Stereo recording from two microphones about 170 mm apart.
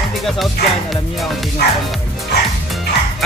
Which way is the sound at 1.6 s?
70° left (ahead or behind).